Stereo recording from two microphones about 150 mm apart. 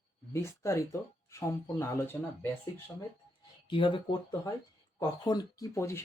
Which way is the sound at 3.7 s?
35° left (ahead or behind).